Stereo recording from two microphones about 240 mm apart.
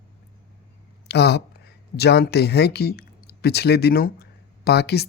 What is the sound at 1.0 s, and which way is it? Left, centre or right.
Speech, left.